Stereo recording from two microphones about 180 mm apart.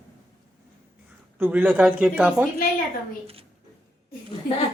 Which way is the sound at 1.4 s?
10° right (ahead or behind).